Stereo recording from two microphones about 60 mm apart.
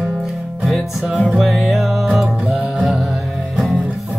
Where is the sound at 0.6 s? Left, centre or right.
Centre.